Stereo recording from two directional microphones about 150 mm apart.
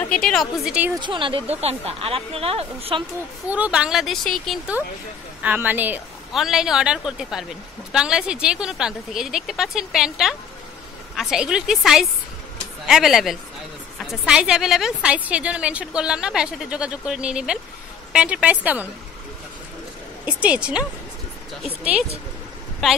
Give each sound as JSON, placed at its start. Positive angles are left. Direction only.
{"t": 0.0, "sound": "speech", "side_deg": 5}
{"t": 0.9, "sound": "speech", "side_deg": -30}
{"t": 3.4, "sound": "speech", "side_deg": -10}
{"t": 5.4, "sound": "a woman's voice", "side_deg": -10}
{"t": 20.2, "sound": "a woman's voice", "side_deg": -10}